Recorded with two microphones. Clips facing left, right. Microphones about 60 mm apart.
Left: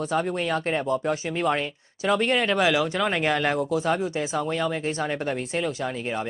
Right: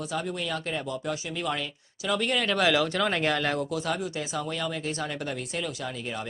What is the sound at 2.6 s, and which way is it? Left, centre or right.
Speech, centre.